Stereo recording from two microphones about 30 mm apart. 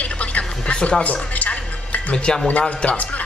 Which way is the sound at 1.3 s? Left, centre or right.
Left.